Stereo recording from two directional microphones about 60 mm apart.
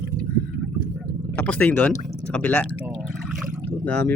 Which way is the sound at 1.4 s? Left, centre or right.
Left.